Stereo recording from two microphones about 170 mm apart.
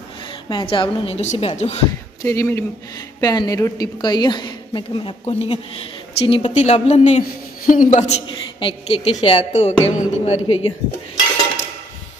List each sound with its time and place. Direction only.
0.5 s a woman's voice: 30° left (ahead or behind)
2.2 s a woman's voice: 15° left (ahead or behind); by 8.1 s 50° left (ahead or behind)
8.3 s a woman's voice: 30° left (ahead or behind)